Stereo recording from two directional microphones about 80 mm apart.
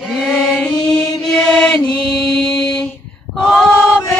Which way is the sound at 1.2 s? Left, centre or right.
Centre.